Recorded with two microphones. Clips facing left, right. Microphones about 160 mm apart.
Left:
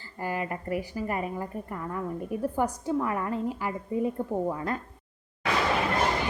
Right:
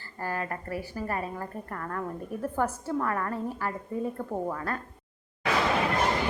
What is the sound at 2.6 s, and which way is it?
Speech, 15° left (ahead or behind).